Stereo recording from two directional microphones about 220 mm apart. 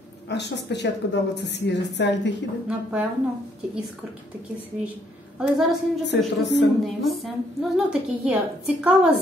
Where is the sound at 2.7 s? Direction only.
5° right (ahead or behind).